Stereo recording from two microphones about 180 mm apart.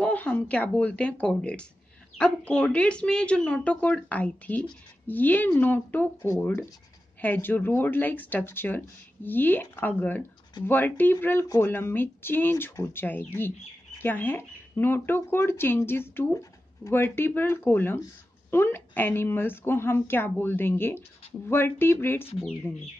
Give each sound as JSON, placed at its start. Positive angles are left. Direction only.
{"t": 0.0, "sound": "speech", "side_deg": 10}
{"t": 22.4, "sound": "speech", "side_deg": 0}